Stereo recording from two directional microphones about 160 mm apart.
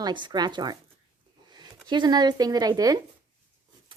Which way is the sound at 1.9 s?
25° right (ahead or behind).